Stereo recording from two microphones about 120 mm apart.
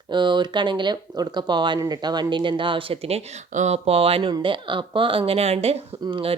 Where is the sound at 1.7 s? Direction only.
35° right (ahead or behind); by 5.8 s 60° right (ahead or behind).